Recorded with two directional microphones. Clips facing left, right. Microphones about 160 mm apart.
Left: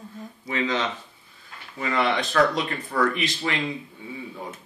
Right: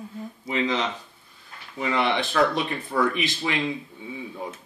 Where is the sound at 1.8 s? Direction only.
5° right (ahead or behind).